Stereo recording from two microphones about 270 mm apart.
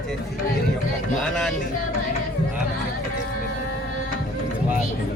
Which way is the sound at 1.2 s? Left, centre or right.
Centre.